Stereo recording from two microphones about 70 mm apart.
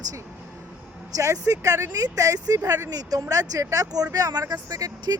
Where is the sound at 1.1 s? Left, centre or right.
Right.